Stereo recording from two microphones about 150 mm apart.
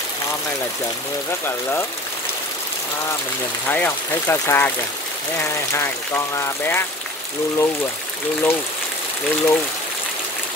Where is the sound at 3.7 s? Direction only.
10° left (ahead or behind).